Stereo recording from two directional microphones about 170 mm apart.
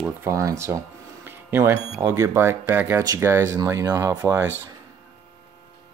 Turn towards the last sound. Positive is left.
turn(degrees=-15)  # may be behind; listen again after turning